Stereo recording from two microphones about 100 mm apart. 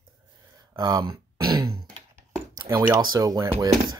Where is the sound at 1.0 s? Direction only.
45° right (ahead or behind).